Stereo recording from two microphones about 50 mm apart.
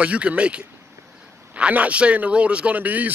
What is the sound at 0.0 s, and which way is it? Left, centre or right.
Speech, right.